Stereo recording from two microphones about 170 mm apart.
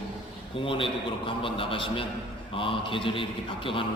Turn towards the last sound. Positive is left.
turn(degrees=30)  # may be behind; listen again after turning